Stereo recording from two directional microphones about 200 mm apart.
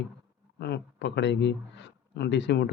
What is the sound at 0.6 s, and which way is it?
A man's voice, 55° left (ahead or behind).